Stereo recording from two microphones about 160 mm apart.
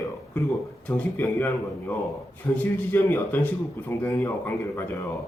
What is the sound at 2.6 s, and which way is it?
Speech, 10° left (ahead or behind).